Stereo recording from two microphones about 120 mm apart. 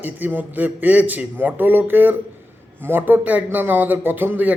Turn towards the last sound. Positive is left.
turn(degrees=-15)  # may be behind; listen again after turning